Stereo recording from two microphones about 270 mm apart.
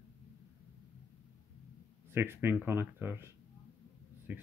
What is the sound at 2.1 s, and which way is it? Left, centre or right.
Speech, centre.